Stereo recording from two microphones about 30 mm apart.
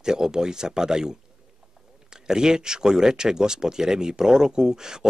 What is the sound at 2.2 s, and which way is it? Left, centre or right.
Speech, right.